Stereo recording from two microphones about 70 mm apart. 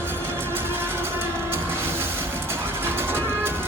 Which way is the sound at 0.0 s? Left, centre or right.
Right.